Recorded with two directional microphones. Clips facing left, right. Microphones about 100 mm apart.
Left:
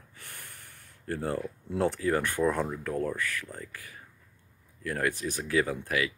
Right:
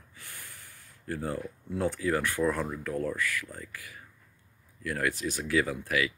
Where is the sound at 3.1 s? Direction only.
20° left (ahead or behind).